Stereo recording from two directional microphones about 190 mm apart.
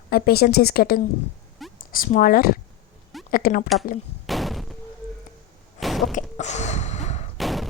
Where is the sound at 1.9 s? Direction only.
45° left (ahead or behind).